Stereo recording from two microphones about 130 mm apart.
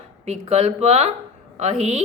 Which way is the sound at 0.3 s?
50° right (ahead or behind).